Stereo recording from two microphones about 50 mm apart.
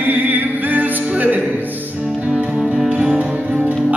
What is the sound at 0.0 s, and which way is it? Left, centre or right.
Music, right.